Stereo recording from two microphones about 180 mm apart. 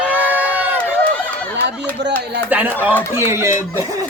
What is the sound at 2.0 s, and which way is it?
Speech, 75° right (ahead or behind).